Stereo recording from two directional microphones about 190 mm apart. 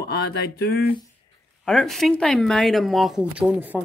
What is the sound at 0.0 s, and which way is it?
Speech, 55° left (ahead or behind).